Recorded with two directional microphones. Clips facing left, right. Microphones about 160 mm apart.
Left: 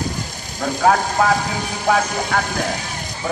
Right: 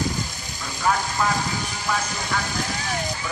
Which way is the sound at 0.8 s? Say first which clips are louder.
Left 7 dB; 60° left (ahead or behind).